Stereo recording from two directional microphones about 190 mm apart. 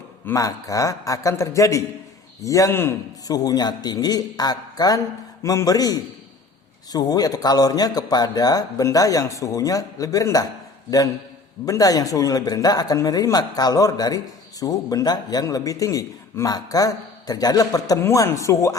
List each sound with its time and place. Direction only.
0.3 s a man's voice: 15° left (ahead or behind)
11.6 s a man's voice: 20° left (ahead or behind)